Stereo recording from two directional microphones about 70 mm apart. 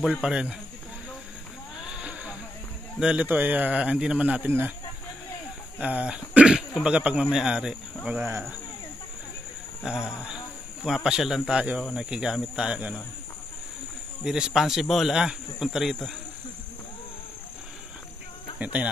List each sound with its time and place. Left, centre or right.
0.0 s speech: centre
1.9 s a sound: centre
3.0 s speech: centre
3.3 s speech: right
3.8 s speech: centre
4.5 s speech: right
5.8 s speech: centre
8.2 s speech: right
9.8 s a sound: centre
11.1 s speech: centre
14.2 s speech: centre
18.6 s speech: right